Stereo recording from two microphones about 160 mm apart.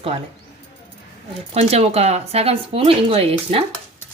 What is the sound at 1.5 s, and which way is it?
Speech, 40° right (ahead or behind).